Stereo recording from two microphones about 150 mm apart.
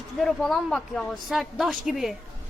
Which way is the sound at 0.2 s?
Centre (ahead or behind).